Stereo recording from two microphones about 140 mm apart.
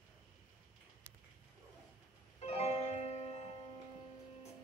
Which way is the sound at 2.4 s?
50° left (ahead or behind).